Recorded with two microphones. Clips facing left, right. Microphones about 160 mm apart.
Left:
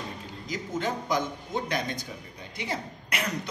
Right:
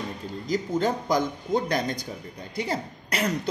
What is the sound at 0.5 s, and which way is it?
Speech, 35° right (ahead or behind).